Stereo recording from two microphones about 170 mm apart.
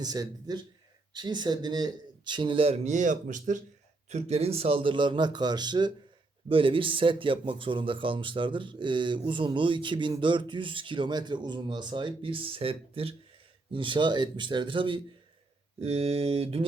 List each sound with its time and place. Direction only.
0.0 s speech: 25° right (ahead or behind); by 3.6 s 50° right (ahead or behind)
4.1 s speech: 40° right (ahead or behind)
15.8 s mantra: 40° right (ahead or behind)